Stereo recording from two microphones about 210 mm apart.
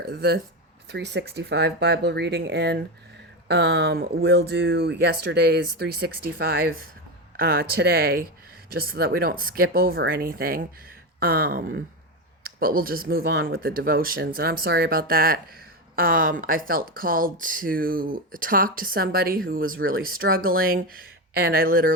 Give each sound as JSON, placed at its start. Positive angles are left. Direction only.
{"t": 0.1, "sound": "speech", "side_deg": -50}